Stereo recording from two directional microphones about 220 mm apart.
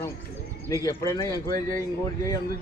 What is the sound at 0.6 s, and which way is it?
Speech, 15° left (ahead or behind).